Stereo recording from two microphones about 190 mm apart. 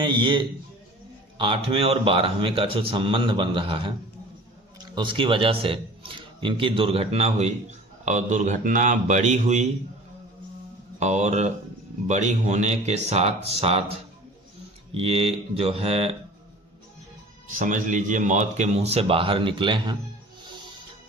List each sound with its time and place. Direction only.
0.1 s a man's voice: 25° right (ahead or behind)
11.0 s speech: 35° right (ahead or behind)
14.9 s speech: 30° right (ahead or behind)
17.5 s speech: 45° right (ahead or behind); by 20.0 s 25° right (ahead or behind)